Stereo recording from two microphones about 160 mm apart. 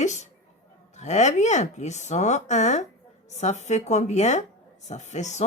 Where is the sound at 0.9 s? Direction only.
45° left (ahead or behind).